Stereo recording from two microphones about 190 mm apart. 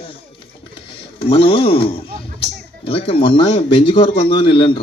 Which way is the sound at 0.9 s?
30° left (ahead or behind).